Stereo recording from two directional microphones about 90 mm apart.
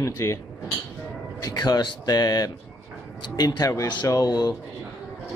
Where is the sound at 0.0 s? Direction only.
35° left (ahead or behind).